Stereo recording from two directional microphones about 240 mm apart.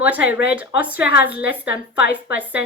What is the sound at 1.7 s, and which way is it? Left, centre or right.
Speech, left.